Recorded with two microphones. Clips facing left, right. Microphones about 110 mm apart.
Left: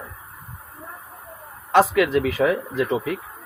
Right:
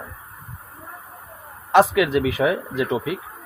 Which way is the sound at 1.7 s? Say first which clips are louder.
Right 1 dB; 20° right (ahead or behind).